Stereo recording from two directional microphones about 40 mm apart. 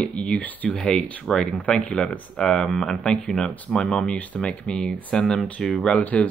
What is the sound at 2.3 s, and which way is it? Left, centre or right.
Speech, centre.